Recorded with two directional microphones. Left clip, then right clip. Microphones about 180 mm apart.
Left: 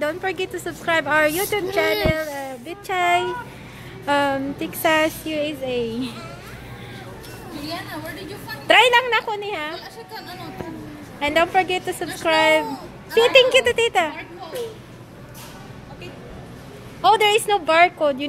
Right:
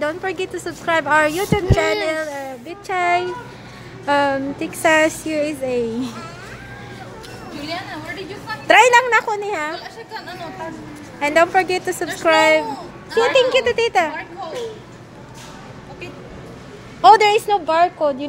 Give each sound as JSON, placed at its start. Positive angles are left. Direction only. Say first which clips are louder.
{"t": 0.0, "sound": "speech", "louder": "right 1 dB", "side_deg": 0}
{"t": 5.3, "sound": "a woman's voice", "louder": "right 3 dB", "side_deg": -15}
{"t": 8.5, "sound": "a woman's voice", "louder": "right 3 dB", "side_deg": -5}
{"t": 13.1, "sound": "a woman's voice", "louder": "left 1 dB", "side_deg": 10}
{"t": 17.2, "sound": "speech", "louder": "right 2 dB", "side_deg": 0}